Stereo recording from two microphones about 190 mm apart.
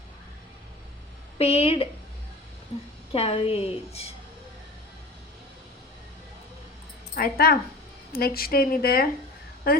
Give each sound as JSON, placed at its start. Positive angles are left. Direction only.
{"t": 1.4, "sound": "a woman's voice", "side_deg": 30}
{"t": 3.1, "sound": "a woman's voice", "side_deg": 30}
{"t": 7.2, "sound": "a woman's voice", "side_deg": 55}